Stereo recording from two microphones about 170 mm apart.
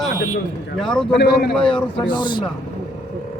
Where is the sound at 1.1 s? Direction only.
70° left (ahead or behind).